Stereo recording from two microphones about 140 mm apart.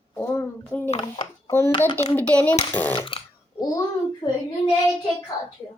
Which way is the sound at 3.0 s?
35° left (ahead or behind).